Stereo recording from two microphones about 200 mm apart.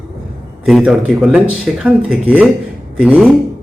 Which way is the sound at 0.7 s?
5° right (ahead or behind).